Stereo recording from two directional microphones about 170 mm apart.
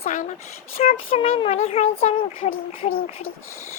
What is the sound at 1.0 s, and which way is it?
Speech, 35° left (ahead or behind).